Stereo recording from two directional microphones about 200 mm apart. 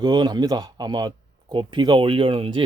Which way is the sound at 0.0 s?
20° right (ahead or behind).